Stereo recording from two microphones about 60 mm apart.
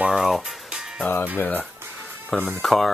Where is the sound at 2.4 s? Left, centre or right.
Centre.